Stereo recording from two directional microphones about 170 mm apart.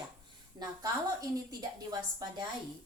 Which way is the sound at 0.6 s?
20° right (ahead or behind).